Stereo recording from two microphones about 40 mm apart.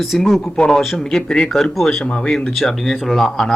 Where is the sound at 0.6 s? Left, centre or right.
Centre.